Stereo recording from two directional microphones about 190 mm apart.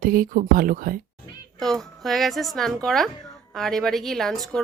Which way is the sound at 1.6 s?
Centre (ahead or behind).